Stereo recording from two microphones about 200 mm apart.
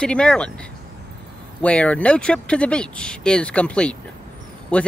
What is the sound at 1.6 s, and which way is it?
Speech, 5° left (ahead or behind).